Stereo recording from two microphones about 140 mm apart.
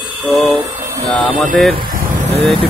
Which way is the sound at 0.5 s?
35° right (ahead or behind).